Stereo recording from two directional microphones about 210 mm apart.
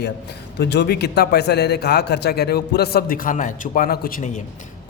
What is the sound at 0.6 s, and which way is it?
Speech, 50° left (ahead or behind).